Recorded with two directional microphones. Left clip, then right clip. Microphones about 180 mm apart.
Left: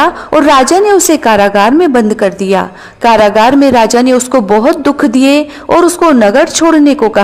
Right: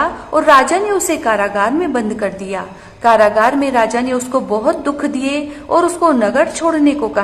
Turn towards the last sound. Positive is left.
turn(degrees=40)  # may be behind; listen again after turning